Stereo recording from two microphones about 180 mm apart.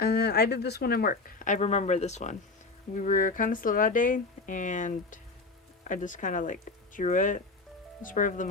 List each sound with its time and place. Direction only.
0.0 s speech: 65° left (ahead or behind); by 8.4 s 45° left (ahead or behind)